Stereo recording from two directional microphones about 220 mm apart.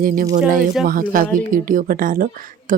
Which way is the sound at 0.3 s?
40° right (ahead or behind).